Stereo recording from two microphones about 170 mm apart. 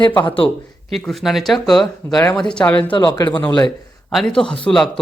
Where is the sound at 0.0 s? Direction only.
25° left (ahead or behind).